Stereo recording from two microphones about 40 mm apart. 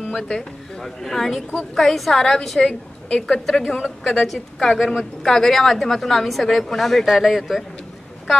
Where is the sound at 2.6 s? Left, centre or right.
Left.